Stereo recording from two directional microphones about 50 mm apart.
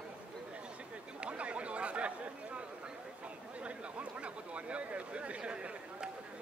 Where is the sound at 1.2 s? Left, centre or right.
Right.